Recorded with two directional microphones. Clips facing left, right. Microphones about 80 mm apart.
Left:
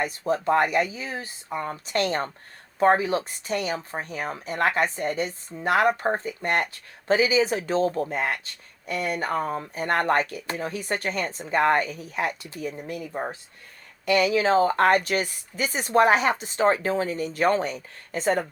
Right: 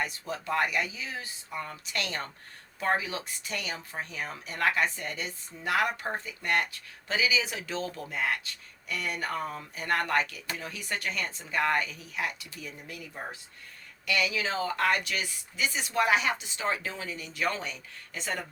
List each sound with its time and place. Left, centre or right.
0.0 s speech: left